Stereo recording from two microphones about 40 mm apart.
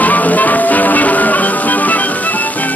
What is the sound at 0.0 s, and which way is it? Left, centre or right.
Music, left.